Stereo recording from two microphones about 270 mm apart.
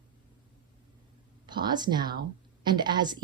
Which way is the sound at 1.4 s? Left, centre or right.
Centre.